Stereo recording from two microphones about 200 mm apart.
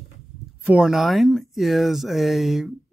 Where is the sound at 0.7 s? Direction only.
5° right (ahead or behind).